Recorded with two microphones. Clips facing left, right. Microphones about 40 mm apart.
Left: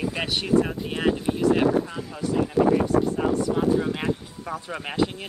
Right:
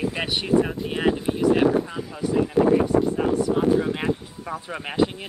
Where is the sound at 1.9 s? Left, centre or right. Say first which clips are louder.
Right 2 dB; centre.